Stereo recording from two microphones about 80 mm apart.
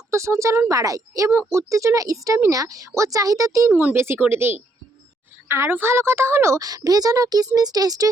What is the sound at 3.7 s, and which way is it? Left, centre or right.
A child's voice, right.